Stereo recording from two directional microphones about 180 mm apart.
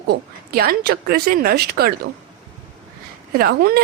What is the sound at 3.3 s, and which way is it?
Speech, 60° right (ahead or behind).